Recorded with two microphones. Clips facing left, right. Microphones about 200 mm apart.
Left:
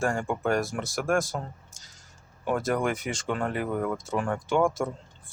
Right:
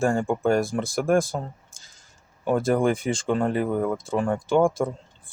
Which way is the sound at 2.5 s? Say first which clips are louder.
Right 5 dB; 30° right (ahead or behind).